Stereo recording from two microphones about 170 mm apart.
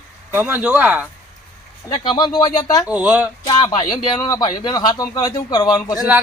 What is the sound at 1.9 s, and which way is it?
Speech, 30° left (ahead or behind).